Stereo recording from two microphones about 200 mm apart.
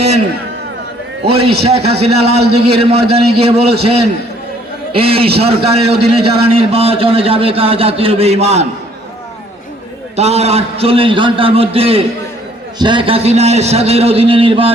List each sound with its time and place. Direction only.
1.3 s a man's voice: 30° right (ahead or behind)
10.2 s a man's voice: 30° right (ahead or behind)